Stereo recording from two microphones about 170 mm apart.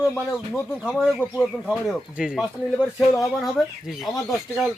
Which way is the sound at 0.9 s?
Centre (ahead or behind).